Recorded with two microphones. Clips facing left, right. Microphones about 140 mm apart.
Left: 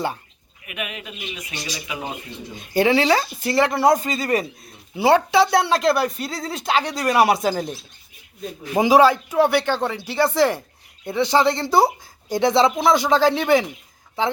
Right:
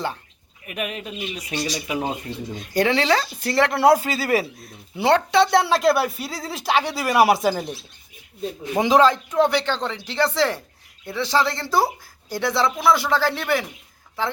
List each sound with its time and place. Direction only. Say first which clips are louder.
0.6 s speech: right 3 dB; 40° right (ahead or behind)
2.7 s speech: left 2 dB; 10° left (ahead or behind)
8.7 s speech: left 2 dB; 10° left (ahead or behind)